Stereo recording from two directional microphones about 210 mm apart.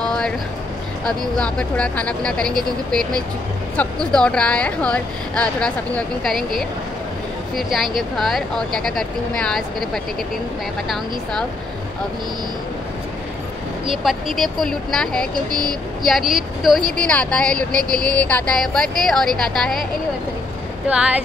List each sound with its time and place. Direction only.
0.0 s music: 5° left (ahead or behind)
1.0 s speech: 5° left (ahead or behind)
13.8 s speech: centre (ahead or behind)
15.3 s speech: 20° right (ahead or behind)
16.1 s speech: centre (ahead or behind)
20.9 s speech: 5° right (ahead or behind)